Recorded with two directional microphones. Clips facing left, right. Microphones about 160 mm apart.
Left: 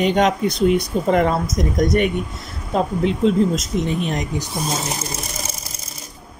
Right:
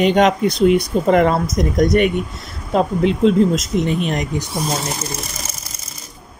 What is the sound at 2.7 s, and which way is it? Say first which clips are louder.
Speech: right 3 dB; 90° right.